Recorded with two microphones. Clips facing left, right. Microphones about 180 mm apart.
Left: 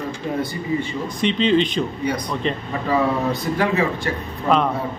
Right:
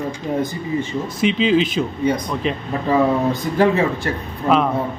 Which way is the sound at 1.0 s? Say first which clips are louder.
Right 2 dB; 5° right (ahead or behind).